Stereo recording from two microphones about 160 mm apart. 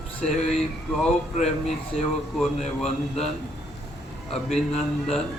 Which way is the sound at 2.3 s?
Centre (ahead or behind).